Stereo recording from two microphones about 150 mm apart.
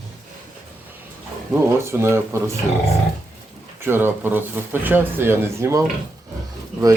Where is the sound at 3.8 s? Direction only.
15° right (ahead or behind).